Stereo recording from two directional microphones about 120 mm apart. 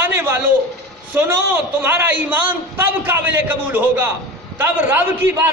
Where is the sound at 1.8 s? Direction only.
15° right (ahead or behind).